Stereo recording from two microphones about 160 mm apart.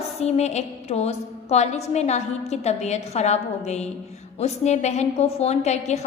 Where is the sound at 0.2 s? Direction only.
45° left (ahead or behind).